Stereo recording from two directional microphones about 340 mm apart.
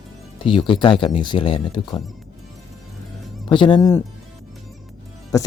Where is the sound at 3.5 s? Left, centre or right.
Centre.